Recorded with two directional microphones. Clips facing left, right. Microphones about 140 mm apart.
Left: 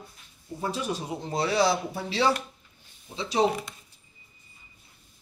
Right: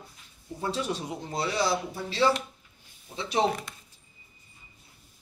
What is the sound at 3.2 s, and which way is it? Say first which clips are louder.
Speech: left 2 dB; 15° left (ahead or behind).